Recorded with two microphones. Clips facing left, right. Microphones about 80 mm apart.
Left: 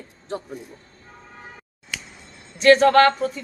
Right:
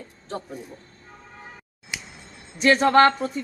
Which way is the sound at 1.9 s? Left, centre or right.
Centre.